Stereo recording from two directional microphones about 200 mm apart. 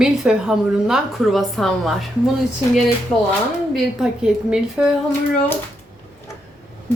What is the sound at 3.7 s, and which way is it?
A woman's voice, 5° right (ahead or behind).